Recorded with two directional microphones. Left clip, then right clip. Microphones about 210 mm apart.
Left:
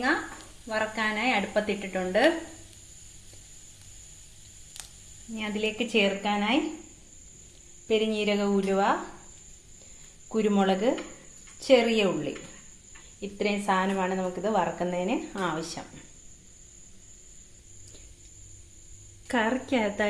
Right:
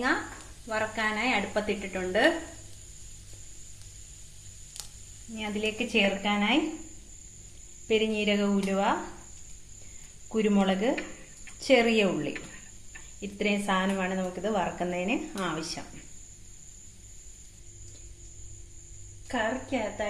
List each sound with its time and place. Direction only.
0.7 s speech: 15° left (ahead or behind)
5.4 s speech: 15° left (ahead or behind)
7.9 s speech: 10° left (ahead or behind)
10.3 s a woman's voice: 15° left (ahead or behind)
19.3 s a woman's voice: 55° left (ahead or behind)